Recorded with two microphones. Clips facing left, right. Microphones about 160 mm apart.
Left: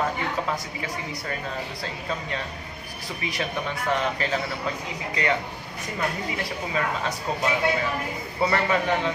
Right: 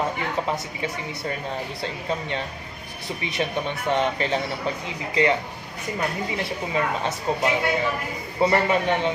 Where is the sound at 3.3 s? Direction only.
25° right (ahead or behind).